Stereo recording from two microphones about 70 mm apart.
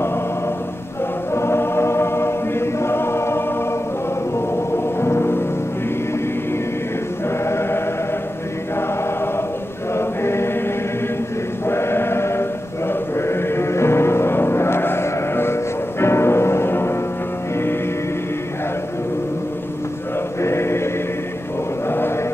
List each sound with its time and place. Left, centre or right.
1.3 s choir: left
5.0 s music: left
7.4 s chant: left
9.9 s choir: left
11.6 s chant: left
20.4 s chant: left
21.8 s chant: left